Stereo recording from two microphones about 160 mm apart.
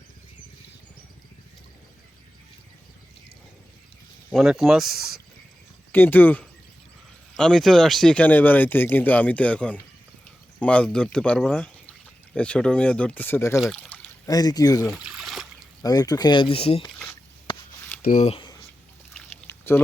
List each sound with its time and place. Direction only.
4.3 s speech: centre (ahead or behind)
5.9 s speech: 10° left (ahead or behind)
13.6 s speech: 5° left (ahead or behind)
14.3 s speech: 25° left (ahead or behind)
14.8 s a sound: centre (ahead or behind)
15.8 s speech: 25° left (ahead or behind)
18.0 s speech: 50° left (ahead or behind)
19.1 s pour: 10° left (ahead or behind)